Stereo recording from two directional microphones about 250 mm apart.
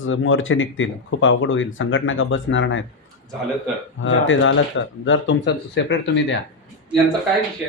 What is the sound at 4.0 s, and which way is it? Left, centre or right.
Speech, left.